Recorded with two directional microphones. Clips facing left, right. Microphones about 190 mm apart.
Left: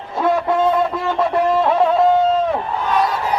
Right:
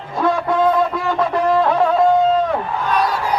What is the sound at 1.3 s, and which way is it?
Music, 5° left (ahead or behind).